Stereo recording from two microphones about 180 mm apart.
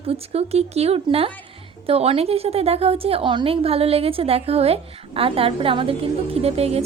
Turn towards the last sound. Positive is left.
turn(degrees=-35)  # may be behind; listen again after turning